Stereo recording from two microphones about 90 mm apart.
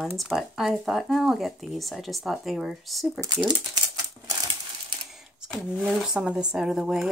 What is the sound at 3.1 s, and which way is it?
Speech, 40° right (ahead or behind).